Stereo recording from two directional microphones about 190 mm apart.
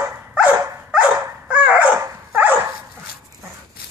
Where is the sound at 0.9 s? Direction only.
5° right (ahead or behind).